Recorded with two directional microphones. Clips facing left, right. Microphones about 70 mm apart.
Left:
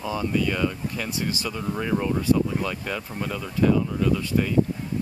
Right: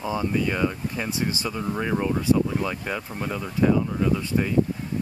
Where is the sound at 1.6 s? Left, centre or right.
Centre.